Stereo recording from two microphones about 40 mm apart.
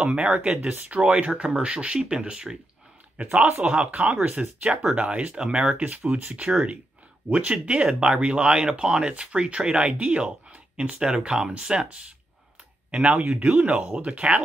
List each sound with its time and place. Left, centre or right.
0.0 s speech: right
3.6 s speech: right
5.3 s speech: right
12.9 s speech: right
13.6 s speech: right
13.9 s speech: right